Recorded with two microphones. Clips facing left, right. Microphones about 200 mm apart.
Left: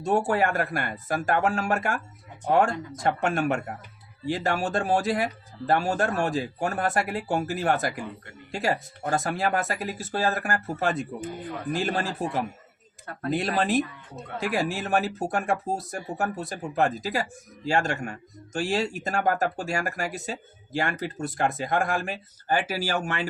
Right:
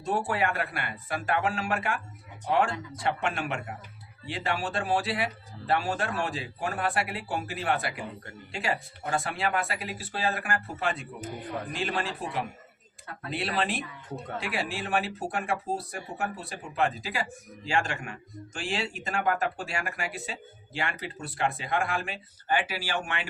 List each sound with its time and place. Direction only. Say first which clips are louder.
0.0 s speech: left 5 dB; 45° left (ahead or behind)